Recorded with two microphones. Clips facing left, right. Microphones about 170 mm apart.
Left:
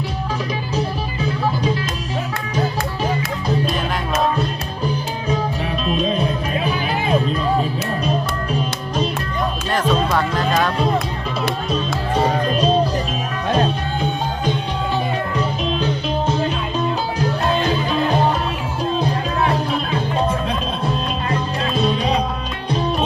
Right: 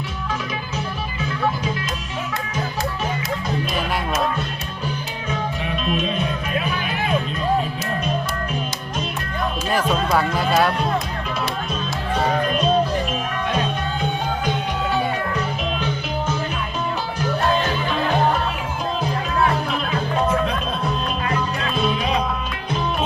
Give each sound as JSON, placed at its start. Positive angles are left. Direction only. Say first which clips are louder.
{"t": 0.8, "sound": "music", "louder": "left 5 dB", "side_deg": 35}
{"t": 5.8, "sound": "music", "louder": "left 4 dB", "side_deg": 35}
{"t": 9.9, "sound": "music", "louder": "left 2 dB", "side_deg": -10}
{"t": 12.5, "sound": "music", "louder": "left 2 dB", "side_deg": 35}
{"t": 15.4, "sound": "music", "louder": "left 3 dB", "side_deg": 30}
{"t": 18.9, "sound": "music", "louder": "even", "side_deg": 30}
{"t": 21.2, "sound": "music", "louder": "left 2 dB", "side_deg": 30}